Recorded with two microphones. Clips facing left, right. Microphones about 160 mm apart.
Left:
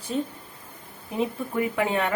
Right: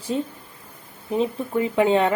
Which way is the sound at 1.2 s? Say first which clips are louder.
Right 2 dB; 25° right (ahead or behind).